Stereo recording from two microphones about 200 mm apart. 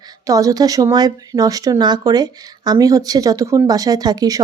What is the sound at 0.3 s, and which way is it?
A woman's voice, 15° right (ahead or behind).